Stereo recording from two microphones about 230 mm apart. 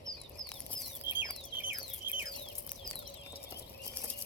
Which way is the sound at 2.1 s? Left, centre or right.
Centre.